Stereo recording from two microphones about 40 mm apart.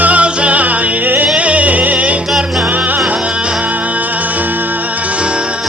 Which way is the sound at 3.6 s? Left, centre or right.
Right.